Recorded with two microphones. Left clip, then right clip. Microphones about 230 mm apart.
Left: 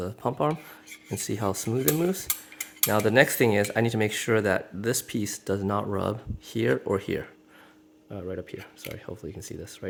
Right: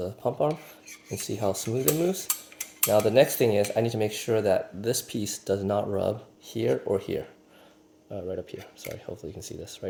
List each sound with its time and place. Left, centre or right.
0.2 s speech: left